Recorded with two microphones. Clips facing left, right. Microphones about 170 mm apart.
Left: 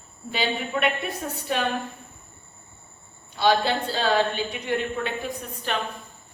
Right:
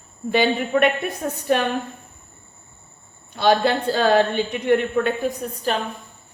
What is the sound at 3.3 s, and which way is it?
A woman's voice, 50° right (ahead or behind).